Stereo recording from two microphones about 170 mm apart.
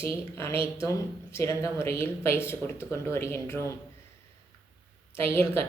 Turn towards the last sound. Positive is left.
turn(degrees=15)  # may be behind; listen again after turning